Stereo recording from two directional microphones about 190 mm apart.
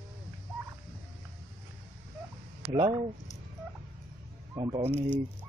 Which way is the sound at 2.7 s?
25° right (ahead or behind).